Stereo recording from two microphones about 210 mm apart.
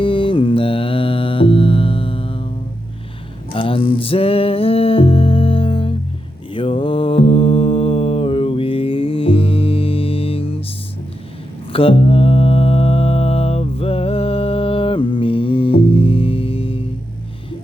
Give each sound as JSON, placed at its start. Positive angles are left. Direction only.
{"t": 0.0, "sound": "mantra", "side_deg": 25}
{"t": 3.5, "sound": "music", "side_deg": 25}
{"t": 6.5, "sound": "mantra", "side_deg": 25}
{"t": 11.7, "sound": "mantra", "side_deg": 25}